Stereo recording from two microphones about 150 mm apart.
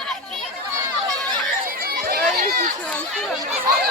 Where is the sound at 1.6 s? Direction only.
80° right.